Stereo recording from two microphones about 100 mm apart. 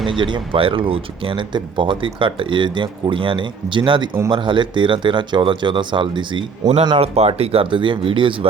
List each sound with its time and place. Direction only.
0.1 s speech: 55° right (ahead or behind)